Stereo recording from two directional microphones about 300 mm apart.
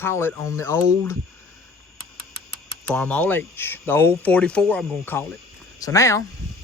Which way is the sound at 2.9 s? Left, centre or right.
Centre.